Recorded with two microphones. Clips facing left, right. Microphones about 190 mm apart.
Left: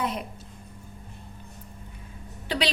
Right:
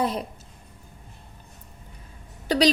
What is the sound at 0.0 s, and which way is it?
Speech, 35° right (ahead or behind).